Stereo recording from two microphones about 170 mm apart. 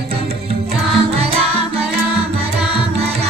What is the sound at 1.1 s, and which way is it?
Music, 35° right (ahead or behind).